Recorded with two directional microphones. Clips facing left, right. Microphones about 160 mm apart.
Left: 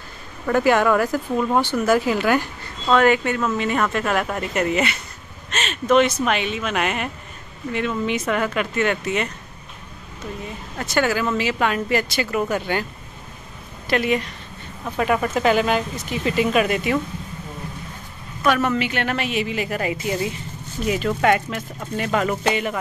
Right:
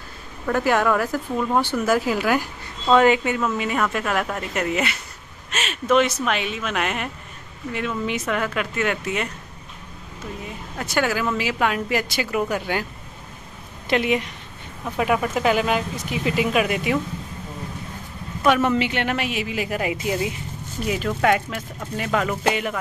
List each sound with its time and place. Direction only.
0.5 s speech: centre (ahead or behind)
2.9 s speech: 15° right (ahead or behind)
10.8 s a woman's voice: 5° right (ahead or behind)
13.8 s a woman's voice: 15° right (ahead or behind)
15.0 s speech: 5° right (ahead or behind)
18.4 s a woman's voice: 20° right (ahead or behind)
20.8 s speech: centre (ahead or behind)